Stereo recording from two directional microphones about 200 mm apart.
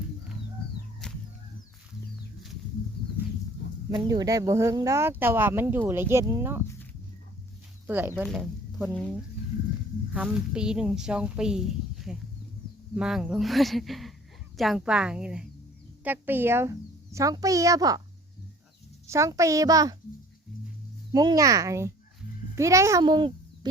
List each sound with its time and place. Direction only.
1.0 s chicken: 5° left (ahead or behind)
3.0 s horse: 50° left (ahead or behind)
3.9 s speech: 20° right (ahead or behind)
7.9 s speech: 10° right (ahead or behind)
19.0 s speech: 15° right (ahead or behind)
21.1 s speech: 20° right (ahead or behind)